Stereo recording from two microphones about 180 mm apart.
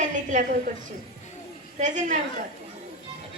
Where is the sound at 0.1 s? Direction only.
45° right (ahead or behind).